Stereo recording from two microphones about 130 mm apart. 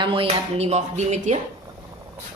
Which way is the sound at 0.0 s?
45° right (ahead or behind).